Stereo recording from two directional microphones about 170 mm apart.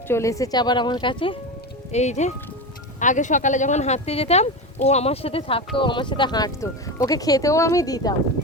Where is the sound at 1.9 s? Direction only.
40° left (ahead or behind); by 8.1 s 20° left (ahead or behind).